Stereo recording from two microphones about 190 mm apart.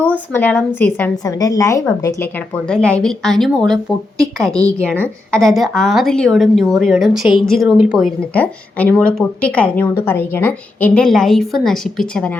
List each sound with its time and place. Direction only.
0.0 s a woman's voice: 10° left (ahead or behind)
2.6 s a woman's voice: 5° left (ahead or behind)
4.4 s a woman's voice: 15° right (ahead or behind)
5.3 s a woman's voice: centre (ahead or behind)